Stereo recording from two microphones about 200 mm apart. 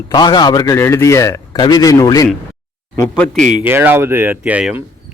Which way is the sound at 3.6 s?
10° right (ahead or behind).